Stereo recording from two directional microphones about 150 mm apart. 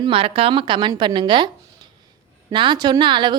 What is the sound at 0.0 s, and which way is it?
Speech, 35° right (ahead or behind).